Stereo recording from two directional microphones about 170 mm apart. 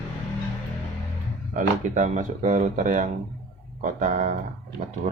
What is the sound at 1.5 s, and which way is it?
Speech, 45° right (ahead or behind).